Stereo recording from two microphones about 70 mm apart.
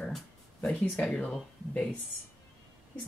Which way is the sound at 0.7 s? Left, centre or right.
Centre.